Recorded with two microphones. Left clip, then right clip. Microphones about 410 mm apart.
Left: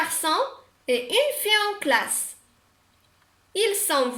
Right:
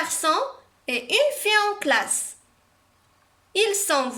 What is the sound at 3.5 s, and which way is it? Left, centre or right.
Speech, right.